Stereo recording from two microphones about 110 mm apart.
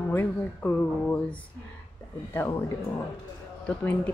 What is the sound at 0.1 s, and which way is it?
Speech, 15° left (ahead or behind).